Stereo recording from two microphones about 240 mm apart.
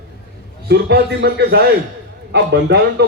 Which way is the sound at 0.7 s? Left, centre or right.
Right.